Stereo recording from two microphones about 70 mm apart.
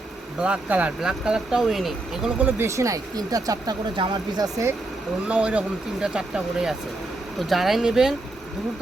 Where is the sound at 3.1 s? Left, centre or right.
Right.